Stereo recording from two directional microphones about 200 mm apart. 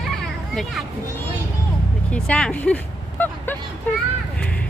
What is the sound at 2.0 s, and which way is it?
Speech, 5° left (ahead or behind).